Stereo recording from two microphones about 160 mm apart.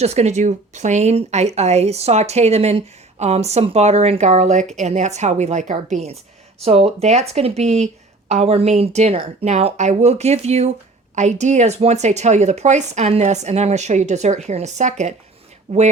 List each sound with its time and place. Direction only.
0.0 s speech: 45° right (ahead or behind)